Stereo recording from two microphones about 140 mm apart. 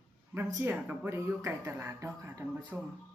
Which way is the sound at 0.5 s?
15° right (ahead or behind).